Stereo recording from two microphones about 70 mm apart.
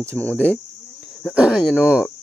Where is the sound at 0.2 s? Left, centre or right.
Centre.